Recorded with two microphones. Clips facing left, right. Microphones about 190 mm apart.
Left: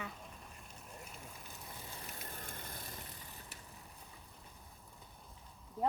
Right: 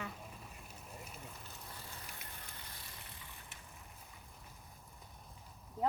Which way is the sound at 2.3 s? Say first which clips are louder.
Left 5 dB; 50° left (ahead or behind).